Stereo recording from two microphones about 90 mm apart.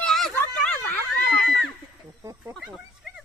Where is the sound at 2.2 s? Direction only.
35° right (ahead or behind).